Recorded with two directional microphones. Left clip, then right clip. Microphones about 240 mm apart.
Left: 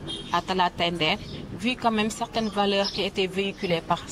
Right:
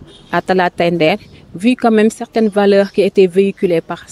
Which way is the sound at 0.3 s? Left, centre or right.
Right.